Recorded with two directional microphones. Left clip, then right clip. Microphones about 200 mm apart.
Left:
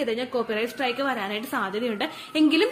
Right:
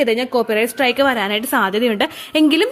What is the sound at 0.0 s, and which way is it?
A woman's voice, 40° right (ahead or behind).